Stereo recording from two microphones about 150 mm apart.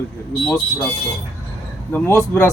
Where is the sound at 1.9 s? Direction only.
15° left (ahead or behind).